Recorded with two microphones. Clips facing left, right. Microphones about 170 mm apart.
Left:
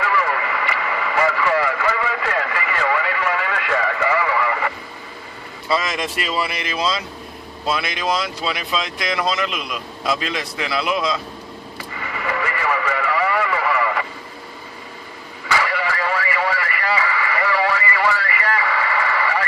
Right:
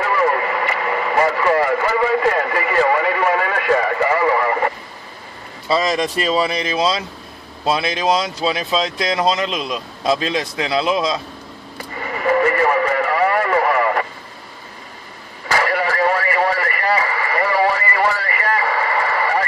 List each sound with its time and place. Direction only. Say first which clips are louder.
0.0 s radio: right 4 dB; 40° right (ahead or behind)
5.7 s speech: right 4 dB; 30° right (ahead or behind)
12.0 s radio: right 9 dB; 45° right (ahead or behind)
15.4 s radio: right 3 dB; 45° right (ahead or behind)